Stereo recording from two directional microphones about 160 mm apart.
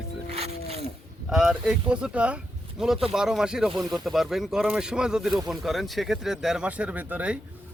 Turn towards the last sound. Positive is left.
turn(degrees=-10)  # may be behind; listen again after turning